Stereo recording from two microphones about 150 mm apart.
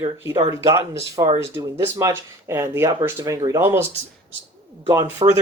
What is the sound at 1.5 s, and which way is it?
Speech, 20° right (ahead or behind).